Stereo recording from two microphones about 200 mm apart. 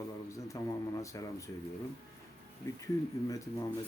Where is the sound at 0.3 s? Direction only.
15° left (ahead or behind).